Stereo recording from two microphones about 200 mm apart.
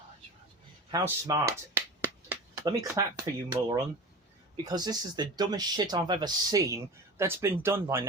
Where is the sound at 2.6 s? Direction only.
20° right (ahead or behind).